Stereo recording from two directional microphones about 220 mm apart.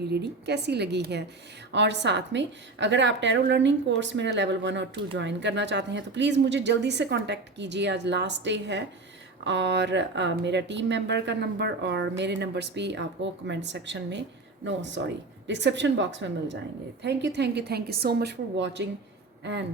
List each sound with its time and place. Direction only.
0.1 s speech: 50° right (ahead or behind)